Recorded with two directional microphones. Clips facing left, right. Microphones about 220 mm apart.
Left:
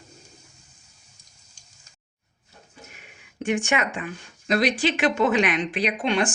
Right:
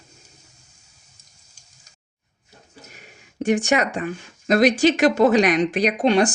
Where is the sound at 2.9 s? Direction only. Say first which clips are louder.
Right 3 dB; 40° right (ahead or behind).